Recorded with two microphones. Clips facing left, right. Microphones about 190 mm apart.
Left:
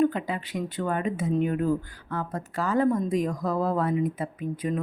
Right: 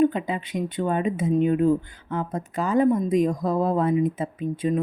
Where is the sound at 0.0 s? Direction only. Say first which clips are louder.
Right 3 dB; 20° right (ahead or behind).